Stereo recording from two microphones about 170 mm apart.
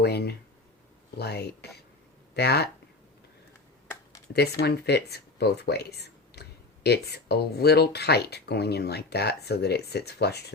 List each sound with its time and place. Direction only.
0.0 s speech: 70° left (ahead or behind)
4.4 s speech: 70° left (ahead or behind)